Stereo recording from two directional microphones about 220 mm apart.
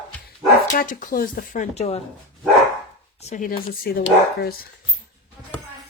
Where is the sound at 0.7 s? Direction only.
40° left (ahead or behind).